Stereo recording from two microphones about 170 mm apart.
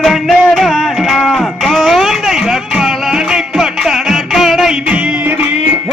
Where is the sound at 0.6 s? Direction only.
Centre (ahead or behind).